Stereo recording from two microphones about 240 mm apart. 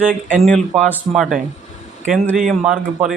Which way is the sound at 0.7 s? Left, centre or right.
Centre.